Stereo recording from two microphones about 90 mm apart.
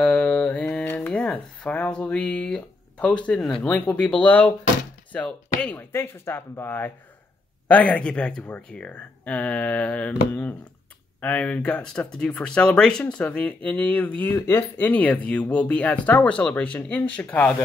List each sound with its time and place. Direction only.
0.0 s a sound: 15° left (ahead or behind)
3.6 s speech: 15° left (ahead or behind)
11.1 s speech: 15° left (ahead or behind)